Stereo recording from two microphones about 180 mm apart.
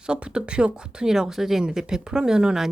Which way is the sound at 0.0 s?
5° right (ahead or behind).